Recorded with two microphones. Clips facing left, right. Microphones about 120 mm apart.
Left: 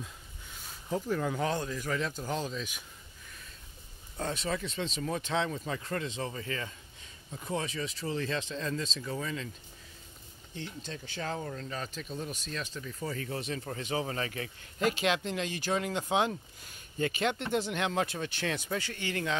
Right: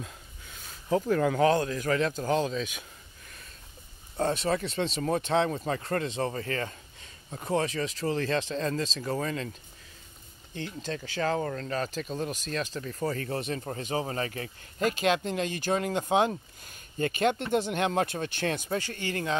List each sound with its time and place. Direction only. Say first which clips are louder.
1.0 s speech: right 8 dB; 65° right (ahead or behind); by 2.6 s 90° right
4.3 s speech: right 5 dB; 55° right (ahead or behind)
4.6 s speech: right 5 dB; 70° right (ahead or behind)
5.0 s speech: right 6 dB; 55° right (ahead or behind); by 7.9 s 85° right
8.1 s speech: right 5 dB; 70° right (ahead or behind)
9.0 s speech: right 5 dB; 55° right (ahead or behind)
10.5 s speech: right 6 dB; 80° right
12.8 s speech: right 6 dB; 50° right (ahead or behind)
13.7 s speech: right 2 dB; 40° right (ahead or behind)